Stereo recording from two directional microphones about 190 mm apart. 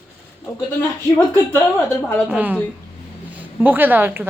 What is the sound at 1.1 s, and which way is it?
Speech, 10° left (ahead or behind).